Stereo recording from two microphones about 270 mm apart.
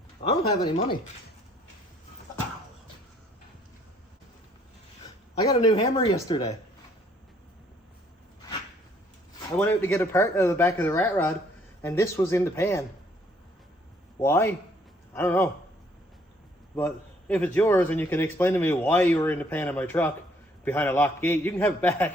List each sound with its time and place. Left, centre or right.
0.2 s speech: centre
5.0 s speech: centre
9.5 s speech: centre
14.2 s a man's voice: centre
16.7 s speech: centre